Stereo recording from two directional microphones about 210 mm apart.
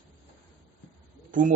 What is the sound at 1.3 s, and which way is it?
Speech, 40° right (ahead or behind).